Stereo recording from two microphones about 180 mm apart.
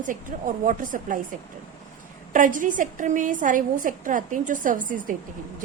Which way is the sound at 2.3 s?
45° right (ahead or behind).